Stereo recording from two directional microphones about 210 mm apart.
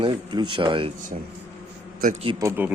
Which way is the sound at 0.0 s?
20° right (ahead or behind).